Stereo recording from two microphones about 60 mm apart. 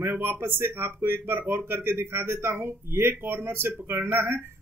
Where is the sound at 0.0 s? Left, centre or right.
Right.